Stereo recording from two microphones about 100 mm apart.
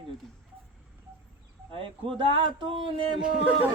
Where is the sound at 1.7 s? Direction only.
60° right (ahead or behind).